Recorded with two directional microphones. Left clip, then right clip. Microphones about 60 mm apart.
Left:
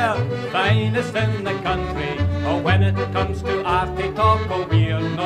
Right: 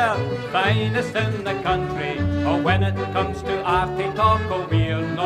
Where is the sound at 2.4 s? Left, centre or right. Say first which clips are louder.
Even; left.